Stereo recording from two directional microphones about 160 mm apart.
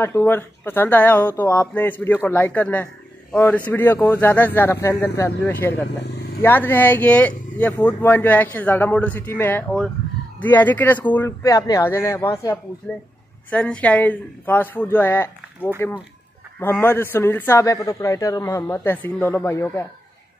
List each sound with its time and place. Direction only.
0.0 s a man's voice: 15° left (ahead or behind)
13.5 s a man's voice: 5° left (ahead or behind)